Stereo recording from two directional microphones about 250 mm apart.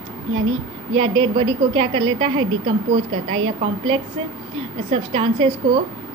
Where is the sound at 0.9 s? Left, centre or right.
Right.